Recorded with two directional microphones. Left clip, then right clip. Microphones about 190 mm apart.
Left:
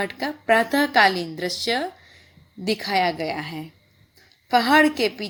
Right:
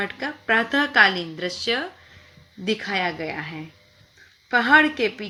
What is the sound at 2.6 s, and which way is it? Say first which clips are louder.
Speech: left 3 dB; 50° left (ahead or behind).